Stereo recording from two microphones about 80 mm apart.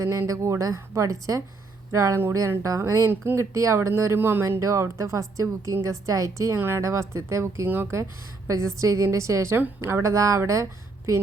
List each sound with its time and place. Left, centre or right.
0.0 s a woman's voice: right
4.6 s a woman's voice: right